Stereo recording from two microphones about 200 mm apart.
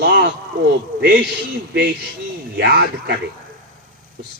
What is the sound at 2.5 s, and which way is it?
Speech, 55° right (ahead or behind).